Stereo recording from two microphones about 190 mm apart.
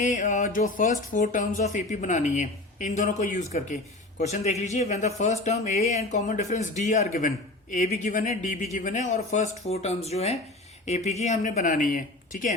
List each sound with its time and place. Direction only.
0.0 s a man's voice: 40° left (ahead or behind)